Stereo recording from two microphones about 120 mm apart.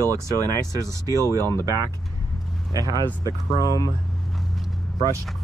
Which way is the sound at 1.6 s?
30° right (ahead or behind).